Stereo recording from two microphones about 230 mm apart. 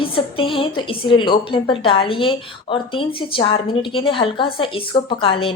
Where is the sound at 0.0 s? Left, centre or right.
Left.